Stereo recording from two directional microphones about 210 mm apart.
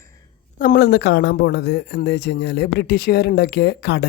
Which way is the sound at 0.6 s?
45° left (ahead or behind).